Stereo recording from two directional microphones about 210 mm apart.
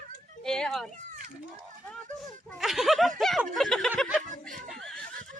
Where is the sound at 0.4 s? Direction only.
Centre (ahead or behind).